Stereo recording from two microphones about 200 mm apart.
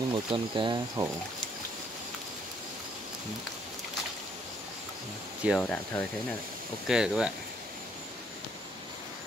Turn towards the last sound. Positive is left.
turn(degrees=-5)  # may be behind; listen again after turning